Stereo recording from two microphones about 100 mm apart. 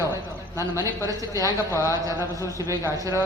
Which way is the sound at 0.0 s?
30° right (ahead or behind).